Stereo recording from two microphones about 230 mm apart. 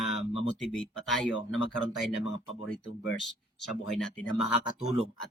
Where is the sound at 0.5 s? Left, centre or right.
Centre.